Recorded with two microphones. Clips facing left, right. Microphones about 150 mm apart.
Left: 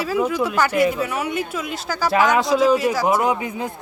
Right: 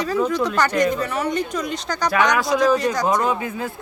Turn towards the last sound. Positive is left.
turn(degrees=20)  # may be behind; listen again after turning